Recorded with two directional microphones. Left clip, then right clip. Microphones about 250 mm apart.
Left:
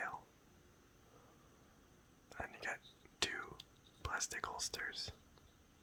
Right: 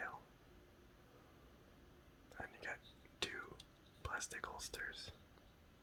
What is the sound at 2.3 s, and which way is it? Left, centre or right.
Whispering, centre.